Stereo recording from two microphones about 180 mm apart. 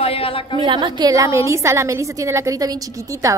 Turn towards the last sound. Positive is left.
turn(degrees=-15)  # may be behind; listen again after turning